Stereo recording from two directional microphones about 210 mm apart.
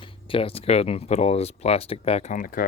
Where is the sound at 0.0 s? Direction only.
25° left (ahead or behind).